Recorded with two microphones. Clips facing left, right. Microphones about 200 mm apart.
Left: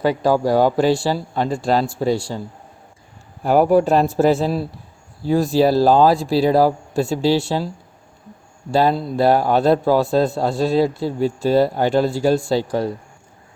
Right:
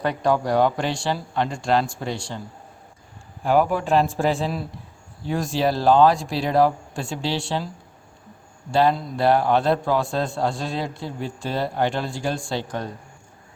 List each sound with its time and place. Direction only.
0.2 s a man's voice: 35° left (ahead or behind)
3.4 s a man's voice: 40° left (ahead or behind)
8.7 s a man's voice: 35° left (ahead or behind)